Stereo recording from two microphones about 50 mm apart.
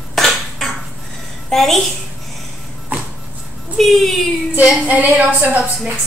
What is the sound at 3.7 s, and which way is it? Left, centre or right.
Speech, centre.